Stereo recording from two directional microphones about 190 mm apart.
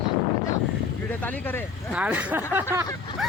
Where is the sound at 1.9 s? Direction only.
5° right (ahead or behind).